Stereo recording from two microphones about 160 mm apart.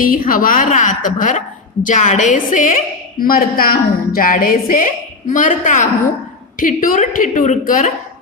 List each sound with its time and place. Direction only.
0.0 s a woman's voice: 60° left (ahead or behind)